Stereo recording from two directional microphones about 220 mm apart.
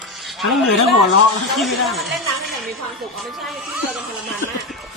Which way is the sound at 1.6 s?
Centre (ahead or behind).